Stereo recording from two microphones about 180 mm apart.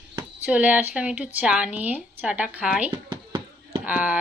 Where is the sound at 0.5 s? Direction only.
10° right (ahead or behind).